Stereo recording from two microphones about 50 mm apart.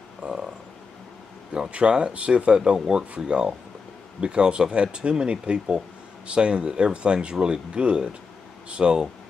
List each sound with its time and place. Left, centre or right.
0.2 s frog: right
1.7 s speech: centre